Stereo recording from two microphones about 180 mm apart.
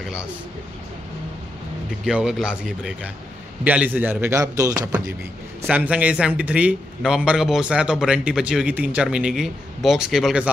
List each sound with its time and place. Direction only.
2.0 s a man's voice: 5° right (ahead or behind); by 4.8 s 20° right (ahead or behind)
5.6 s a man's voice: 10° right (ahead or behind)